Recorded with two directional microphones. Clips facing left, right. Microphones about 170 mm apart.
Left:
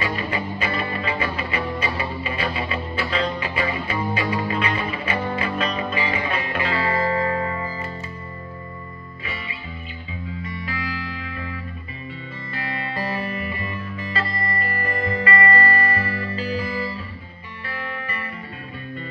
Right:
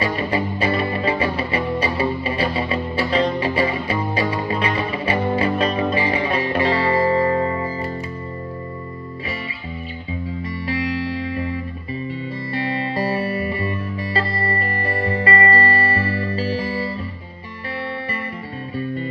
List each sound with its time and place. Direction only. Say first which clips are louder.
0.0 s music: right 5 dB; 35° right (ahead or behind)
10.4 s music: right 8 dB; 35° right (ahead or behind)